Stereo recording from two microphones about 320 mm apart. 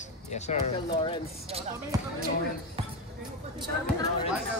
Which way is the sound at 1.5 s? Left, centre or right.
Centre.